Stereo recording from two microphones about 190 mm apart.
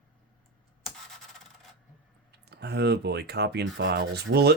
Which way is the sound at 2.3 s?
60° right (ahead or behind).